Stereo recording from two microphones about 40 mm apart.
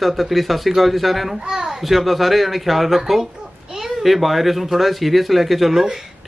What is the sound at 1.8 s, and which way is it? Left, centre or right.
A man's voice, centre.